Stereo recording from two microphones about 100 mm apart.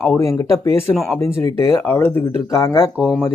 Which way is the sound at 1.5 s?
30° left (ahead or behind).